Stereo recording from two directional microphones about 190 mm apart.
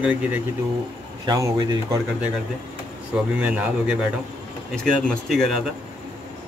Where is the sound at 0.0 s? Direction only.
5° right (ahead or behind).